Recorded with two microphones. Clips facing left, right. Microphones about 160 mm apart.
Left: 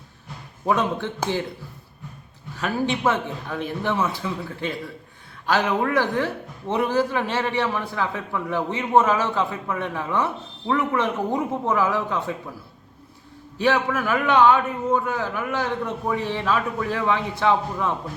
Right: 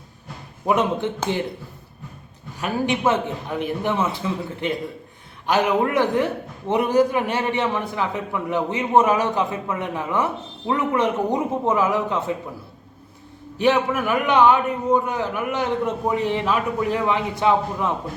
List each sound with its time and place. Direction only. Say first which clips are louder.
0.6 s a man's voice: right 2 dB; 20° right (ahead or behind)
2.6 s a man's voice: right 1 dB; 15° right (ahead or behind)
13.6 s a man's voice: right 2 dB; 20° right (ahead or behind)